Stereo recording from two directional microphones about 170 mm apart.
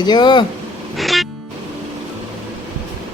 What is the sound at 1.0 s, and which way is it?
Music, centre (ahead or behind).